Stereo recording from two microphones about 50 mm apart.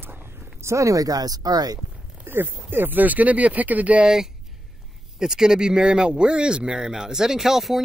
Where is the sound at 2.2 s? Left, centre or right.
Right.